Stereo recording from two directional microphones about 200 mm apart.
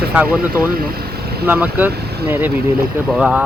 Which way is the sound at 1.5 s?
10° right (ahead or behind).